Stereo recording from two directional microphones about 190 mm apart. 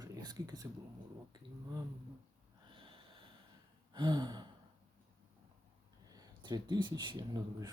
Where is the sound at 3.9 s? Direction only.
25° right (ahead or behind).